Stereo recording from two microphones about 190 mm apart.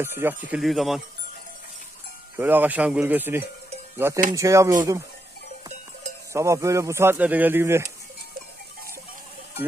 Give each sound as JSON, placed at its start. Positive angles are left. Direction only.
{"t": 0.0, "sound": "speech", "side_deg": -10}
{"t": 2.3, "sound": "a man's voice", "side_deg": -10}
{"t": 6.3, "sound": "a man's voice", "side_deg": -15}